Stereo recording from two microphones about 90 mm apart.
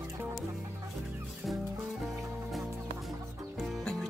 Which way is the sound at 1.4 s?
Centre (ahead or behind).